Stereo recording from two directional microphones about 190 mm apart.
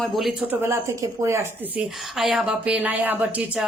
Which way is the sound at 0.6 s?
15° right (ahead or behind).